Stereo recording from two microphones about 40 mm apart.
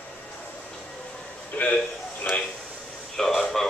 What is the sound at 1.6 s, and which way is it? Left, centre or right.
Speech, left.